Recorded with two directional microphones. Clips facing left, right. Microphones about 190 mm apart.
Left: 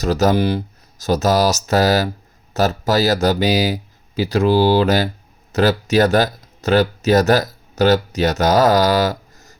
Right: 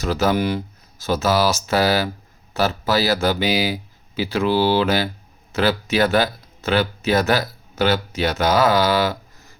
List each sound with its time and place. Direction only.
0.0 s speech: 40° left (ahead or behind)